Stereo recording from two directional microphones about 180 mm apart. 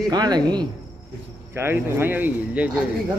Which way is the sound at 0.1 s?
20° right (ahead or behind).